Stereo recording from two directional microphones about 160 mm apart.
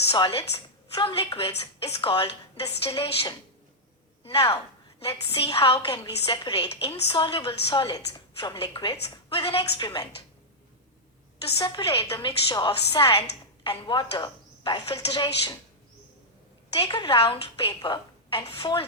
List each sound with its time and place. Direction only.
0.1 s a woman's voice: 30° left (ahead or behind)
11.4 s a woman's voice: 30° left (ahead or behind)
16.7 s a woman's voice: 25° left (ahead or behind)